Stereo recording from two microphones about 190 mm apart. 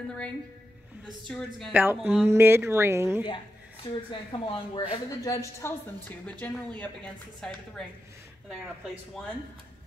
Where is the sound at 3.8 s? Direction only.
25° left (ahead or behind); by 9.2 s centre (ahead or behind).